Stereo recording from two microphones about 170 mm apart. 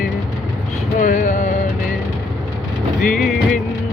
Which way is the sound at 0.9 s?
50° left (ahead or behind).